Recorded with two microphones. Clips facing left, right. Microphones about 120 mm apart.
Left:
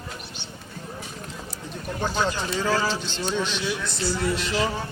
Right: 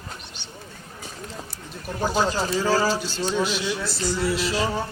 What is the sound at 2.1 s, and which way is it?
Speech, 35° right (ahead or behind).